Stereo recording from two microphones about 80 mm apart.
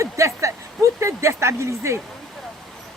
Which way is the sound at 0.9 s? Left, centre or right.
Right.